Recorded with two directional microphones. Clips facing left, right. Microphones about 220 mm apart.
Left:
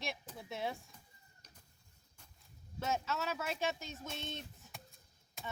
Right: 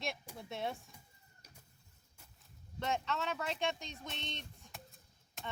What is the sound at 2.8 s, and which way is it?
Speech, 5° left (ahead or behind).